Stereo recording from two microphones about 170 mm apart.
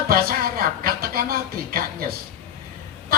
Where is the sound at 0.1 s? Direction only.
60° right (ahead or behind).